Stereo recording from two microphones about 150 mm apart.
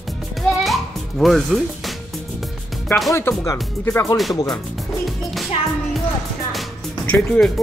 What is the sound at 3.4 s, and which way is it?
Speech, 20° left (ahead or behind).